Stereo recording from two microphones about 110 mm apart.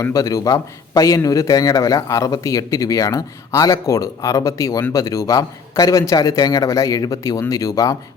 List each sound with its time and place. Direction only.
0.0 s a man's voice: 30° left (ahead or behind)